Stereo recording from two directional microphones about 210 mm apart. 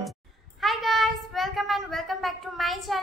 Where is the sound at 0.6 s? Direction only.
Centre (ahead or behind).